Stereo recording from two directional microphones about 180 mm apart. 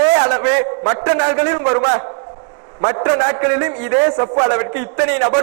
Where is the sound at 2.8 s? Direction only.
20° right (ahead or behind).